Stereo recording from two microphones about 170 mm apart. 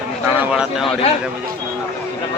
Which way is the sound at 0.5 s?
5° right (ahead or behind).